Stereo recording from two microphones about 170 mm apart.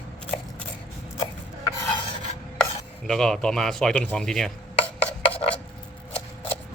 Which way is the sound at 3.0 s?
5° left (ahead or behind).